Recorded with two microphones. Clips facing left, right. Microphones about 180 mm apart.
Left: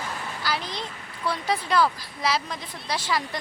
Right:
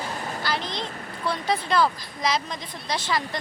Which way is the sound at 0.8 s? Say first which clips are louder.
Right 5 dB; 45° right (ahead or behind).